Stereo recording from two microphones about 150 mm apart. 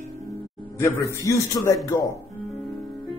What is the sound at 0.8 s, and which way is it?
Speech, 15° left (ahead or behind).